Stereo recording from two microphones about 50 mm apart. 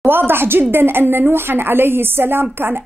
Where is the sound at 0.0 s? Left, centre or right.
Right.